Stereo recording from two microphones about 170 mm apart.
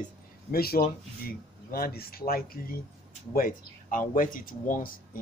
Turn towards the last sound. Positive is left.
turn(degrees=55)  # may be behind; listen again after turning